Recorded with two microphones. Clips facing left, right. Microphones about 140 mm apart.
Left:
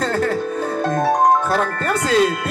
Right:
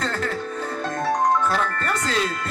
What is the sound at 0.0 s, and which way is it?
Music, 50° left (ahead or behind).